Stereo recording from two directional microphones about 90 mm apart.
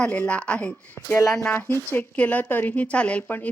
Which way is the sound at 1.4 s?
25° left (ahead or behind).